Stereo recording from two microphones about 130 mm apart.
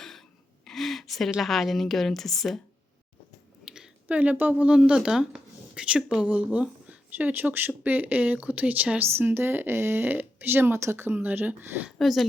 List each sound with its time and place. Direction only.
0.6 s a woman's voice: centre (ahead or behind)
3.7 s speech: 5° right (ahead or behind)
11.9 s speech: centre (ahead or behind)